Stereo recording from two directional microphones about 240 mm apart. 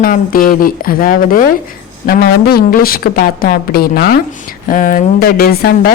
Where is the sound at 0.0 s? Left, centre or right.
Left.